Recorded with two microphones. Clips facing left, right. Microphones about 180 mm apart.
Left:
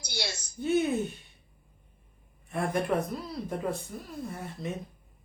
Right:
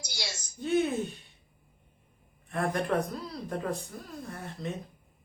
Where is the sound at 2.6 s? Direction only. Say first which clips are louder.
Even; centre (ahead or behind).